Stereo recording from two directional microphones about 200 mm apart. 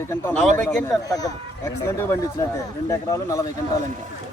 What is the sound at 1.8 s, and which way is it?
A man's voice, 15° left (ahead or behind).